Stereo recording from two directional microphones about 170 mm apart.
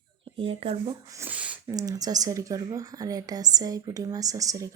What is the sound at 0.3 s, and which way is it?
Speech, 30° right (ahead or behind).